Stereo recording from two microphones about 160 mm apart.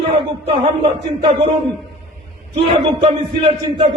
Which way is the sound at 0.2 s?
35° right (ahead or behind).